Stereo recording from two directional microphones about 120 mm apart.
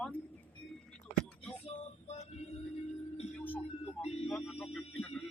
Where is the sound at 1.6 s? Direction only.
60° left (ahead or behind).